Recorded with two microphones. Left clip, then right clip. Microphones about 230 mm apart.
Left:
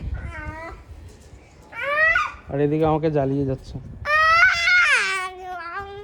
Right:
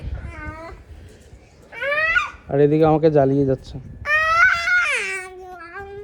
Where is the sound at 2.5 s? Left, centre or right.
Centre.